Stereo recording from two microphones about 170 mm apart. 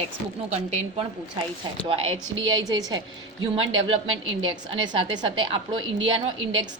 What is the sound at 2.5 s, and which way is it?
Speech, 25° right (ahead or behind).